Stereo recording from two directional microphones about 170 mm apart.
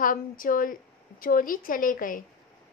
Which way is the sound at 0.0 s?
55° left (ahead or behind).